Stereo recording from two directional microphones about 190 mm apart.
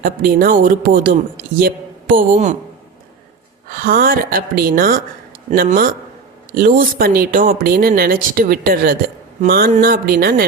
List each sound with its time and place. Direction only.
0.0 s a man's voice: 50° right (ahead or behind)
3.7 s speech: 50° right (ahead or behind)